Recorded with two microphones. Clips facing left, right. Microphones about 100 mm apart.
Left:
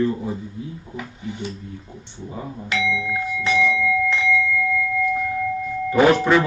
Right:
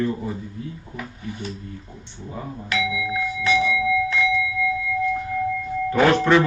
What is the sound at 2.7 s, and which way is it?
Doorbell, 30° left (ahead or behind).